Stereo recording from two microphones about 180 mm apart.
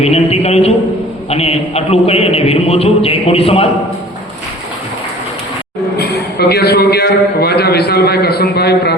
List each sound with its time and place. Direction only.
0.0 s a man's voice: 35° left (ahead or behind)
6.0 s a man's voice: 60° left (ahead or behind)